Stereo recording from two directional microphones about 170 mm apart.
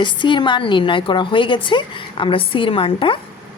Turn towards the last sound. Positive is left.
turn(degrees=30)  # may be behind; listen again after turning